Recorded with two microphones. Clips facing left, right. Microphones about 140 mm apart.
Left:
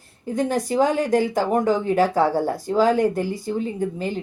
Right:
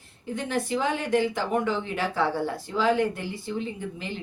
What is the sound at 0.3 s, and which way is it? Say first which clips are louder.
Speech: left 7 dB; 40° left (ahead or behind).